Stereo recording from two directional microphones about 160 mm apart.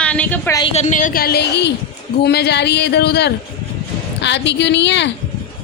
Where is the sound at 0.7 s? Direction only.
50° left (ahead or behind); by 5.1 s 90° left.